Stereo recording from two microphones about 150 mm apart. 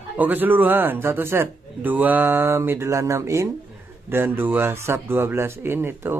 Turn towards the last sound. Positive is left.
turn(degrees=-15)  # may be behind; listen again after turning